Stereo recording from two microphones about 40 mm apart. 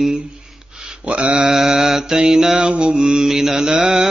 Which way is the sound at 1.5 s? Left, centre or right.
Centre.